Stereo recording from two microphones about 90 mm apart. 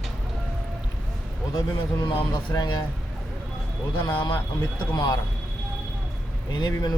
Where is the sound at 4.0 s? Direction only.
55° left (ahead or behind).